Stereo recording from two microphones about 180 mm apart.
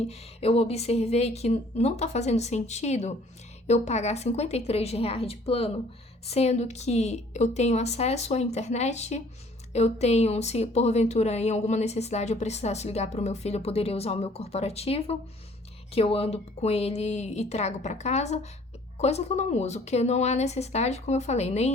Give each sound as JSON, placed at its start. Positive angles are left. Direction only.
{"t": 0.0, "sound": "a woman's voice", "side_deg": 35}